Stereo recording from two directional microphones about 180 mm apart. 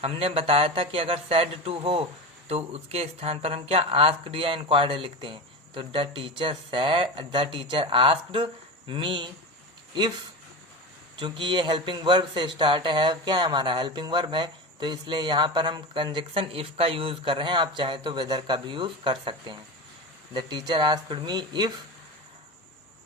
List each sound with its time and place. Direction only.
0.0 s speech: 30° right (ahead or behind)
11.2 s speech: 25° right (ahead or behind)